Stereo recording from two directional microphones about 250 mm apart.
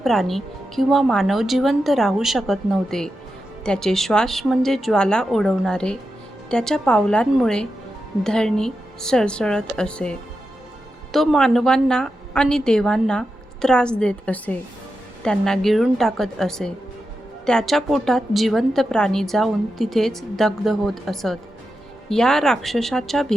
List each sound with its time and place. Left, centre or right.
0.0 s a woman's voice: centre